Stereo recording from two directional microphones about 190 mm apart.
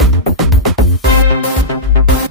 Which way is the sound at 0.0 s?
Centre (ahead or behind).